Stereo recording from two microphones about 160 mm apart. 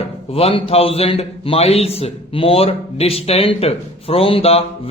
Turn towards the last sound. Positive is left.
turn(degrees=40)  # may be behind; listen again after turning